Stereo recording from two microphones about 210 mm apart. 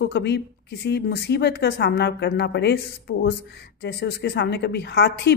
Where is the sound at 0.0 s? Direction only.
55° left (ahead or behind).